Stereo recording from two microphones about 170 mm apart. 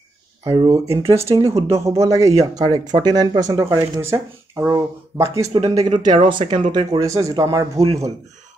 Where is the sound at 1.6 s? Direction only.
15° right (ahead or behind).